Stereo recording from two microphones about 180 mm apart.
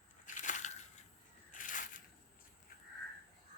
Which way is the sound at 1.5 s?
45° left (ahead or behind).